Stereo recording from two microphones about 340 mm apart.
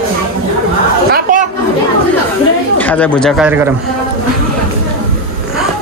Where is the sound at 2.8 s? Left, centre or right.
Centre.